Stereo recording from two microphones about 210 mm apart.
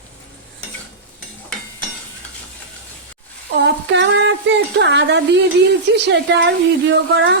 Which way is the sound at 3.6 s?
55° right (ahead or behind).